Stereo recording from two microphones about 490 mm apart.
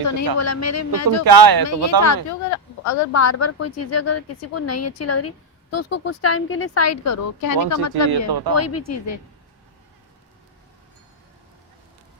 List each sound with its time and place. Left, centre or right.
0.0 s speech: left
1.2 s speech: right
2.2 s speech: left
8.3 s speech: right
8.5 s speech: left